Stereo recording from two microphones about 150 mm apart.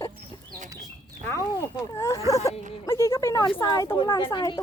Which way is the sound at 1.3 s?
20° left (ahead or behind).